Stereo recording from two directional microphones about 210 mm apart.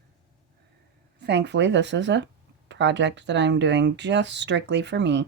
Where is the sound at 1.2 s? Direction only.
55° right (ahead or behind).